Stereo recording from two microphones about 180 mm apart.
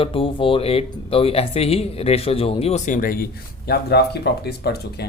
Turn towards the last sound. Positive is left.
turn(degrees=65)  # may be behind; listen again after turning